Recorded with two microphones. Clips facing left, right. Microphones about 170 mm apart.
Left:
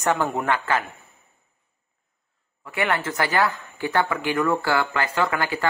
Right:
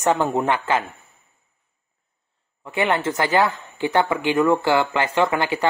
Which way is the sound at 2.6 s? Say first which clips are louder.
Right 3 dB; 25° right (ahead or behind).